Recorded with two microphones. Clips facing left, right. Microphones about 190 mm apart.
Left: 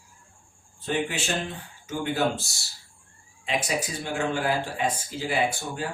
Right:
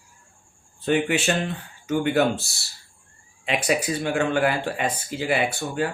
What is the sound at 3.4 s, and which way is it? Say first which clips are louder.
Speech: right 4 dB; 65° right (ahead or behind).